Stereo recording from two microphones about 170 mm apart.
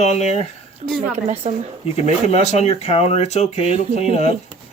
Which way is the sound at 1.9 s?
40° left (ahead or behind).